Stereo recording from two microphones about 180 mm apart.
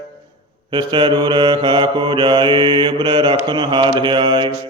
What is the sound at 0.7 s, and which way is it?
Mantra, 25° right (ahead or behind).